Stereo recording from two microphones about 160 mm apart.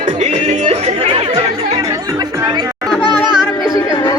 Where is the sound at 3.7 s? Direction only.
25° left (ahead or behind).